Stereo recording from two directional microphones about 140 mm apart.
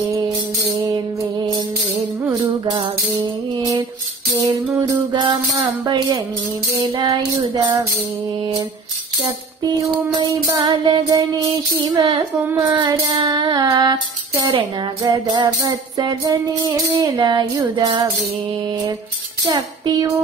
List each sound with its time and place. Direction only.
2.2 s music: 35° right (ahead or behind)
4.5 s music: 30° right (ahead or behind)
6.8 s child singing: 35° right (ahead or behind)
10.5 s child singing: 30° right (ahead or behind)
12.7 s music: 30° right (ahead or behind)
19.4 s child singing: 25° right (ahead or behind)